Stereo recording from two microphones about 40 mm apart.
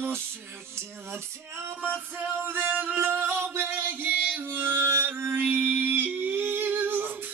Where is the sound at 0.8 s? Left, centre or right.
Right.